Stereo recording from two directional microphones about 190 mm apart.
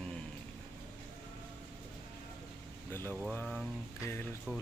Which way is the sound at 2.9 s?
10° left (ahead or behind).